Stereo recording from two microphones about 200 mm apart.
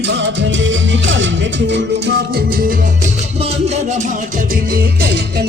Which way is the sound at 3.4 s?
30° right (ahead or behind).